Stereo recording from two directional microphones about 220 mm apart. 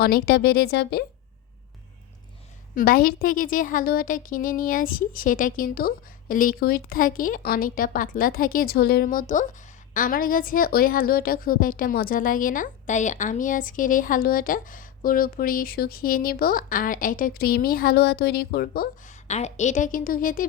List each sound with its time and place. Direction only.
0.0 s speech: 45° left (ahead or behind)
2.7 s a woman's voice: 40° left (ahead or behind)
19.3 s a woman's voice: 30° left (ahead or behind)